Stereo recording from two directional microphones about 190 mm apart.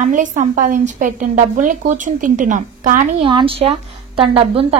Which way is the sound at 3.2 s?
30° right (ahead or behind).